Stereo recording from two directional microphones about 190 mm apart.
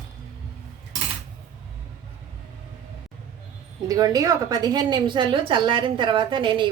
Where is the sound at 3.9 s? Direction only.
20° right (ahead or behind).